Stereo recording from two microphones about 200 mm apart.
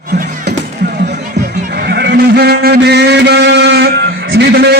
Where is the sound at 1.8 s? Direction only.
55° right (ahead or behind).